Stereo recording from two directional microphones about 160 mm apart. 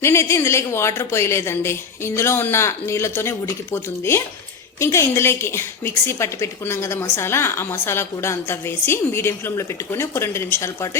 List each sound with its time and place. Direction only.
0.0 s a woman's voice: 15° left (ahead or behind)